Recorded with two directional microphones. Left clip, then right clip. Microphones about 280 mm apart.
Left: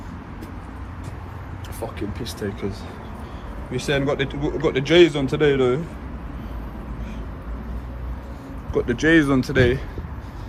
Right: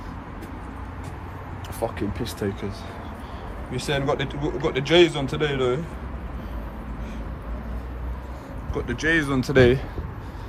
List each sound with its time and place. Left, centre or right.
2.0 s speech: right
3.7 s a man's voice: centre
8.7 s speech: centre